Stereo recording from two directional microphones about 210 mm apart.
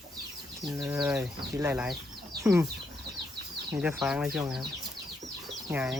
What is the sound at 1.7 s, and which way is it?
Speech, 5° right (ahead or behind).